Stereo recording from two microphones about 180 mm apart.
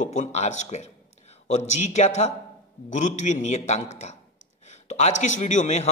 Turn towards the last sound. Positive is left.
turn(degrees=40)  # may be behind; listen again after turning